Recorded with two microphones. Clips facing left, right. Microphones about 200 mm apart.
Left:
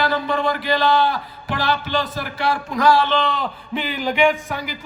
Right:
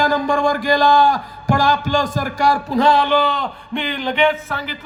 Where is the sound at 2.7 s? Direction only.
25° right (ahead or behind).